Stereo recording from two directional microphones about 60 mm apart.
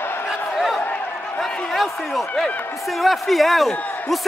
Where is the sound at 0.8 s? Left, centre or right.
Left.